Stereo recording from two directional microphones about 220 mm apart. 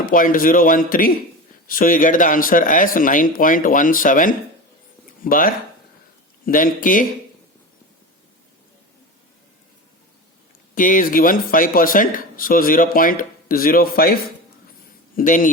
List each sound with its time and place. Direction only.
0.0 s speech: 40° left (ahead or behind)
10.8 s speech: 40° left (ahead or behind)